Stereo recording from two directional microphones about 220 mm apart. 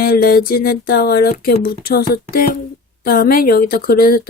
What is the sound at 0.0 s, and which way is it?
Speech, 45° left (ahead or behind).